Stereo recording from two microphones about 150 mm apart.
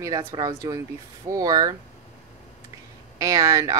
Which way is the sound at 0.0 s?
25° right (ahead or behind).